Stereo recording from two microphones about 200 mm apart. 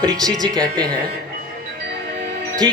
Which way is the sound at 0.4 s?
20° right (ahead or behind).